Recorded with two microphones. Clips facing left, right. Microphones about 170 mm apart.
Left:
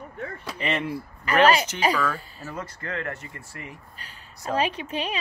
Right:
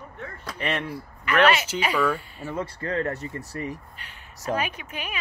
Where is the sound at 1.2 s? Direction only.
35° left (ahead or behind).